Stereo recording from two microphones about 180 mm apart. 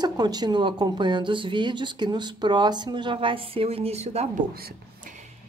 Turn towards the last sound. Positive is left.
turn(degrees=-60)  # may be behind; listen again after turning